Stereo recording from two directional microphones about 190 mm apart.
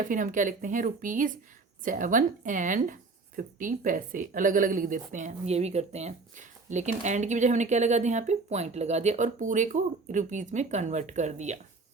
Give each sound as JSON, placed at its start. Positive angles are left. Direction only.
{"t": 0.0, "sound": "a woman's voice", "side_deg": -45}